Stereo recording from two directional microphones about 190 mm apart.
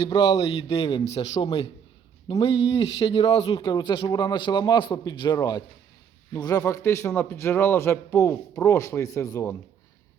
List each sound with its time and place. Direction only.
0.1 s a man's voice: 20° left (ahead or behind)